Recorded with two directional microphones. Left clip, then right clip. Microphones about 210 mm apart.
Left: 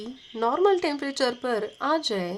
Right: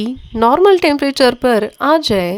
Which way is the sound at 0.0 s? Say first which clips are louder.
Right 13 dB; 45° right (ahead or behind).